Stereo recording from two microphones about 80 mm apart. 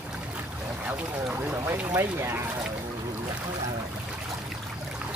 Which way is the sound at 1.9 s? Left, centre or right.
Right.